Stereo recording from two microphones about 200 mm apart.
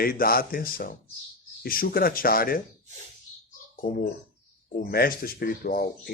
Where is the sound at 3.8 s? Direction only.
45° left (ahead or behind).